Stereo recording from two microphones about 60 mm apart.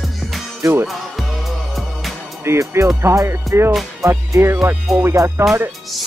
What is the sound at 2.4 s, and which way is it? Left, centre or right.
Speech, right.